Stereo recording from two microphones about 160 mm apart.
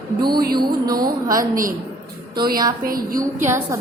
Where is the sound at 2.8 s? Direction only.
60° right (ahead or behind).